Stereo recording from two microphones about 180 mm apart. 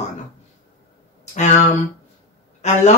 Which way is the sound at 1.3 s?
40° left (ahead or behind).